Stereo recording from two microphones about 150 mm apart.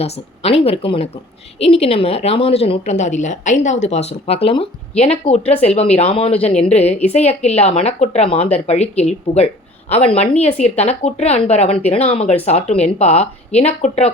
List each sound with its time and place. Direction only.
0.0 s a woman's voice: 40° left (ahead or behind)